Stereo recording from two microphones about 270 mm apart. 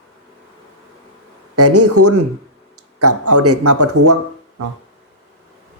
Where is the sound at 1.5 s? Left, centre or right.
Right.